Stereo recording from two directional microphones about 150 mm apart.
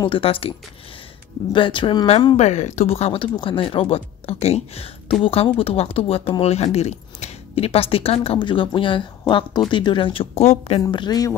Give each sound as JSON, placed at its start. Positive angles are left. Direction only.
{"t": 0.0, "sound": "speech", "side_deg": 35}
{"t": 2.3, "sound": "speech", "side_deg": 50}
{"t": 10.8, "sound": "a woman's voice", "side_deg": 30}